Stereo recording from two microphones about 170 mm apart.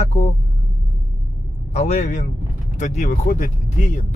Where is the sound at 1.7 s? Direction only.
40° left (ahead or behind).